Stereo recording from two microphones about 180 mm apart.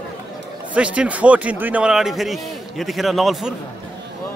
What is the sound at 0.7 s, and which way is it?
A man's voice, 5° right (ahead or behind).